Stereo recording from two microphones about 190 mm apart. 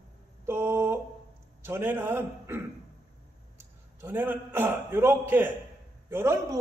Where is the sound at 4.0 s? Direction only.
10° right (ahead or behind).